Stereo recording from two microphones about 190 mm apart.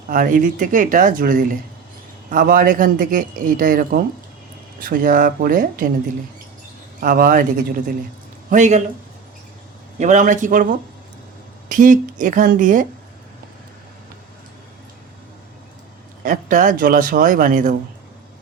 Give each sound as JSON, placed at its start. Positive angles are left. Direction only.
{"t": 0.1, "sound": "speech", "side_deg": -45}
{"t": 7.0, "sound": "speech", "side_deg": -45}
{"t": 10.0, "sound": "speech", "side_deg": -40}
{"t": 16.2, "sound": "speech", "side_deg": -45}